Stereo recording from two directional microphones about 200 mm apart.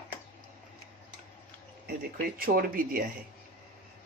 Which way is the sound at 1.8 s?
50° right (ahead or behind).